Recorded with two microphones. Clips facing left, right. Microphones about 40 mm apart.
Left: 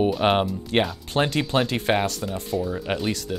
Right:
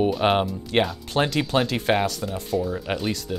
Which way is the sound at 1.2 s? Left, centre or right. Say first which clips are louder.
Right 1 dB; left.